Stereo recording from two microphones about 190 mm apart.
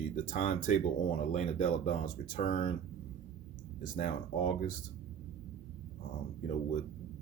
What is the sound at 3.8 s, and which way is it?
Speech, 45° left (ahead or behind).